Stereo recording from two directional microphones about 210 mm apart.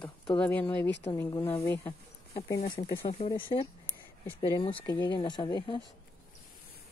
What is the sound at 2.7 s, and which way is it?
Speech, 25° left (ahead or behind).